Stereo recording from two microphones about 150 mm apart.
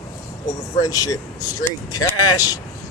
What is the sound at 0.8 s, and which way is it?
Speech, 25° left (ahead or behind).